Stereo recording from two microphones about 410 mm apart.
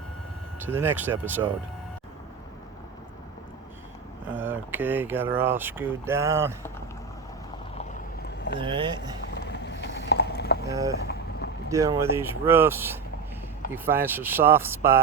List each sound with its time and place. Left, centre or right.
0.6 s speech: centre
4.4 s speech: centre
8.5 s speech: centre
9.3 s boat: left
10.7 s speech: centre
11.0 s boat: left
11.7 s speech: centre